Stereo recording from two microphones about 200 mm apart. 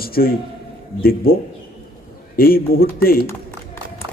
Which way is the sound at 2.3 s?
45° left (ahead or behind).